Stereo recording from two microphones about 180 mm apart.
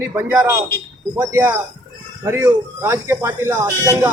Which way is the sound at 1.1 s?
15° right (ahead or behind).